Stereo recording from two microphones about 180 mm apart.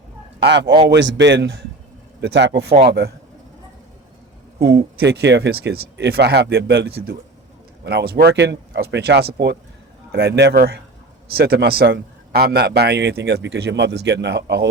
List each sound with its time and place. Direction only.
0.4 s a man's voice: 70° right (ahead or behind)
4.6 s a man's voice: 65° right (ahead or behind)